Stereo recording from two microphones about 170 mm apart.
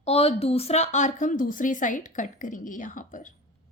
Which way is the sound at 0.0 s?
35° left (ahead or behind).